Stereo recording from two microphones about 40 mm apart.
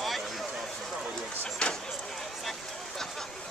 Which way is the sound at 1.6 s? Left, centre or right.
Left.